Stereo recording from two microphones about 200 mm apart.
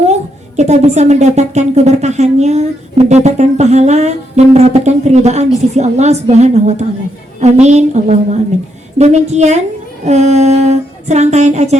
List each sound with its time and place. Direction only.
0.0 s a woman's voice: 35° right (ahead or behind)